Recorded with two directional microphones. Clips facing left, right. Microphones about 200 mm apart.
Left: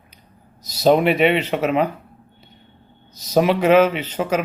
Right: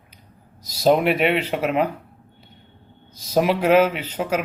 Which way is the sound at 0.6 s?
10° right (ahead or behind).